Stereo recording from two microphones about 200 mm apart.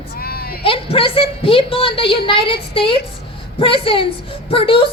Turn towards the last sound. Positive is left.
turn(degrees=25)  # may be behind; listen again after turning